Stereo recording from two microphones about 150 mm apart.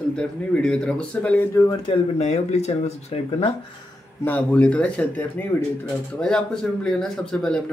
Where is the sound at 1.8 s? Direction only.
40° left (ahead or behind).